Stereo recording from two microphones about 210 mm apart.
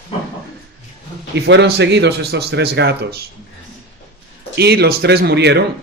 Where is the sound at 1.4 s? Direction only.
55° right (ahead or behind).